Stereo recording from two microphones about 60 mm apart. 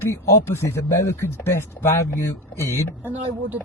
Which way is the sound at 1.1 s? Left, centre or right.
Left.